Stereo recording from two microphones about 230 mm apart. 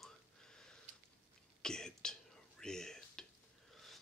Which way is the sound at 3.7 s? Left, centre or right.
Centre.